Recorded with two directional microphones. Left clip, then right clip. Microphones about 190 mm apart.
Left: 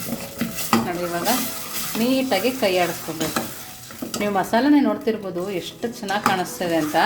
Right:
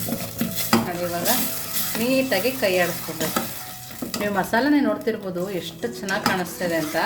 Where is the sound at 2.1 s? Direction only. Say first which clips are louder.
Even; 20° left (ahead or behind).